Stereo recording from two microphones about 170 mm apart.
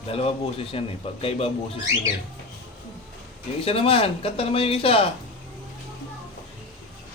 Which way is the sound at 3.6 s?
35° left (ahead or behind).